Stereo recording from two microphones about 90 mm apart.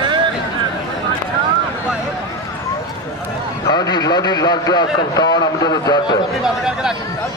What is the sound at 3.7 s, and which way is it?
A man's voice, 45° left (ahead or behind).